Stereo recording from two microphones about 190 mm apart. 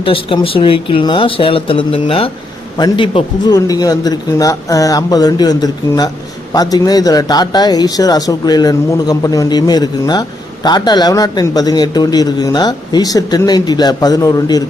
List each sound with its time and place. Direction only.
0.0 s speech: 30° left (ahead or behind)